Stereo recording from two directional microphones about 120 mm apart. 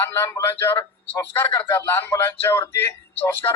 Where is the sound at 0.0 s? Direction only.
20° left (ahead or behind).